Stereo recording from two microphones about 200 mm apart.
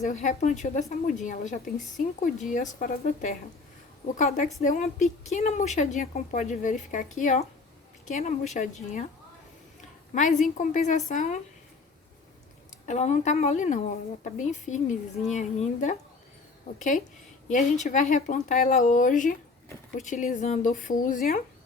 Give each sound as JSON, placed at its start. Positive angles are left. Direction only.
{"t": 0.0, "sound": "a woman's voice", "side_deg": 35}
{"t": 10.2, "sound": "a woman's voice", "side_deg": 40}
{"t": 12.8, "sound": "a woman's voice", "side_deg": 35}
{"t": 17.5, "sound": "a woman's voice", "side_deg": 40}